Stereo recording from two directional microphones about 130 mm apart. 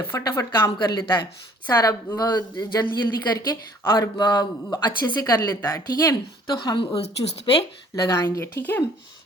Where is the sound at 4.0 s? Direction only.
35° left (ahead or behind); by 8.8 s 15° left (ahead or behind).